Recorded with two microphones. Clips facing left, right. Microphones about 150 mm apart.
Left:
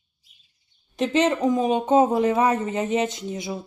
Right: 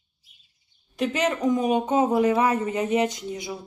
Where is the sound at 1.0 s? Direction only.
25° left (ahead or behind).